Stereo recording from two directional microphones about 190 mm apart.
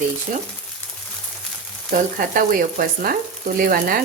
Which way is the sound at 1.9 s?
45° right (ahead or behind).